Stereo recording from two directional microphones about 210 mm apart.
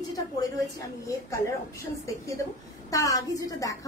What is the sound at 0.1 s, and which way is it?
A woman's voice, 15° left (ahead or behind).